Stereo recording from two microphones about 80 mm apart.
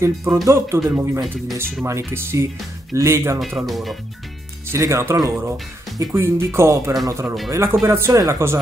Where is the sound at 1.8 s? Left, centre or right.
Right.